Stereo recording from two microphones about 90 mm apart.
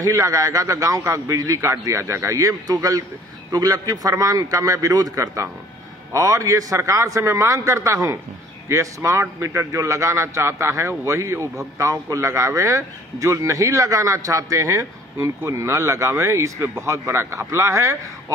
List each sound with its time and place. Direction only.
0.0 s a man's voice: 40° right (ahead or behind)